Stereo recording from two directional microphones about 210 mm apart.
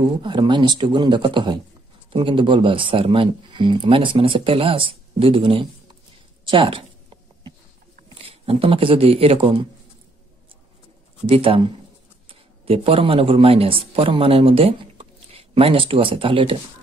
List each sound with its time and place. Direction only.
0.2 s speech: 20° right (ahead or behind)
8.1 s speech: 25° right (ahead or behind)
11.2 s speech: 25° right (ahead or behind)